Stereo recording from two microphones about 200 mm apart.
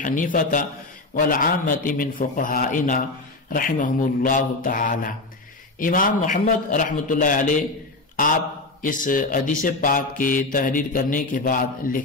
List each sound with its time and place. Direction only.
0.0 s a man's voice: 40° left (ahead or behind)
8.8 s speech: 40° left (ahead or behind)